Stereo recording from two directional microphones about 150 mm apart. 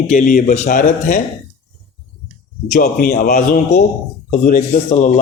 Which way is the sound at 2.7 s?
75° left (ahead or behind).